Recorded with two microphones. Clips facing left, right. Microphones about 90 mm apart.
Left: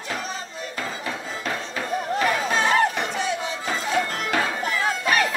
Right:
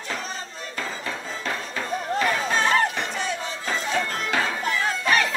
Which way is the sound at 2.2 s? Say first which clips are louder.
Left 1 dB; 35° right (ahead or behind).